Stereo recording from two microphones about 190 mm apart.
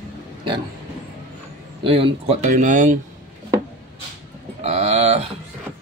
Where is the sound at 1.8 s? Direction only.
30° right (ahead or behind).